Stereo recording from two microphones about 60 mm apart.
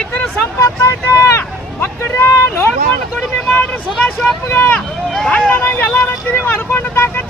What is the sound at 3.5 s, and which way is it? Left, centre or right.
Vehicle, left.